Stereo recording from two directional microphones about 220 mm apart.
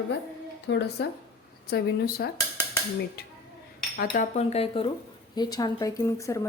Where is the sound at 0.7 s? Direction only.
55° left (ahead or behind).